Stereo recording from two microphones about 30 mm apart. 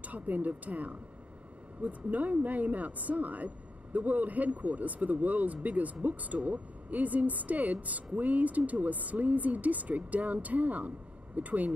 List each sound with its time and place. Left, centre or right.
0.0 s a woman's voice: right